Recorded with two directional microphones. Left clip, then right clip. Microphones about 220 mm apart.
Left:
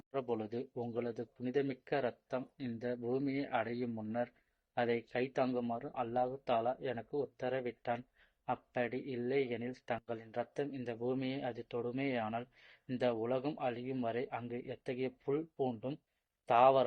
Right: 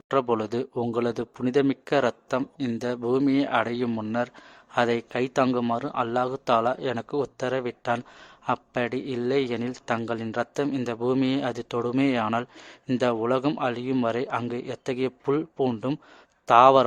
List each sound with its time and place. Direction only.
0.1 s speech: 40° right (ahead or behind)